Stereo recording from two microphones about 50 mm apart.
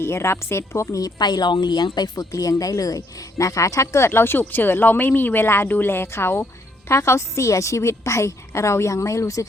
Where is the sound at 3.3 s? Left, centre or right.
Left.